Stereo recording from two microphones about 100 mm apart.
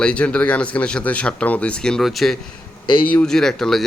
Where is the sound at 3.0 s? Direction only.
10° left (ahead or behind).